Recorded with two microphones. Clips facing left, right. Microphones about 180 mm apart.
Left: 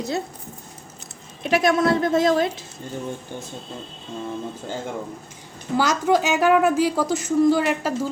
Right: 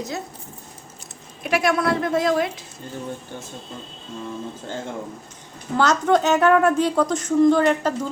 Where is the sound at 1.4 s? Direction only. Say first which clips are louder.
Left 2 dB; 20° left (ahead or behind).